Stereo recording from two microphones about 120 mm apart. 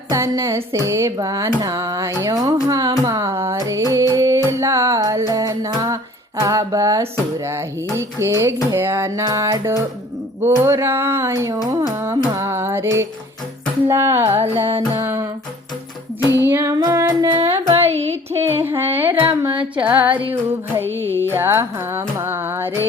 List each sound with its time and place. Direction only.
0.1 s music: 25° right (ahead or behind)
14.4 s music: 55° right (ahead or behind)
14.9 s music: 25° right (ahead or behind)
16.3 s music: 20° right (ahead or behind)
17.8 s music: 60° right (ahead or behind)
18.4 s music: 20° right (ahead or behind)